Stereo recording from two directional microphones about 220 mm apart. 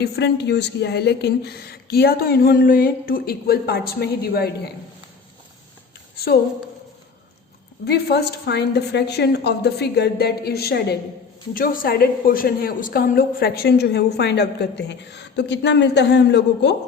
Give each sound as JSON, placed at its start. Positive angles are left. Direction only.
{"t": 0.0, "sound": "a woman's voice", "side_deg": 50}
{"t": 6.1, "sound": "a woman's voice", "side_deg": 45}
{"t": 7.9, "sound": "a woman's voice", "side_deg": 45}